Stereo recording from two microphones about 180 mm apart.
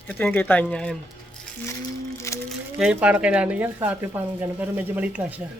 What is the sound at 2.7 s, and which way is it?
Speech, 5° right (ahead or behind).